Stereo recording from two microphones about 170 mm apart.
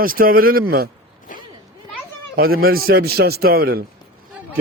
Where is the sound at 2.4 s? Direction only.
60° right (ahead or behind).